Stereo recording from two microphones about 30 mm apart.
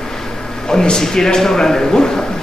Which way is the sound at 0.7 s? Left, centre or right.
Left.